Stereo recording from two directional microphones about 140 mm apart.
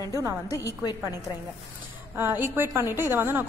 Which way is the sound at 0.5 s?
25° left (ahead or behind).